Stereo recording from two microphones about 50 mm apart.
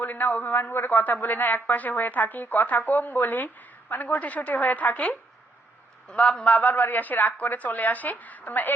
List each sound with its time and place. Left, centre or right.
0.0 s a woman's voice: left
6.1 s a man's voice: centre
6.6 s a woman's voice: left